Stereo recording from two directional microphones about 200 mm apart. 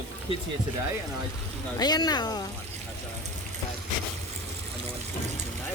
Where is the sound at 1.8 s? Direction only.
20° left (ahead or behind).